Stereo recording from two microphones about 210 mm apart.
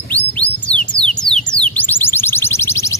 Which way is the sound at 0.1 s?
5° left (ahead or behind).